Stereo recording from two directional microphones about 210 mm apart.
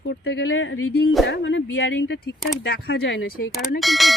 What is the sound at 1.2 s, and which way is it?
Speech, 60° left (ahead or behind).